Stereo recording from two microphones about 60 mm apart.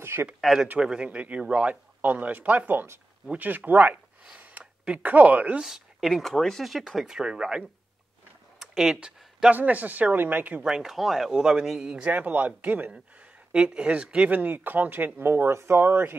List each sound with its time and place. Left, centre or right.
0.0 s speech: right
0.4 s speech: centre
0.7 s speech: centre; by 3.9 s right
3.9 s a sound: centre
5.0 s speech: right
5.6 s speech: centre
8.5 s a sound: centre
9.5 s speech: right
10.6 s speech: centre
12.1 s speech: right